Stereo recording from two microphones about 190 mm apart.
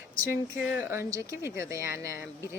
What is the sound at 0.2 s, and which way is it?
Speech, 10° right (ahead or behind).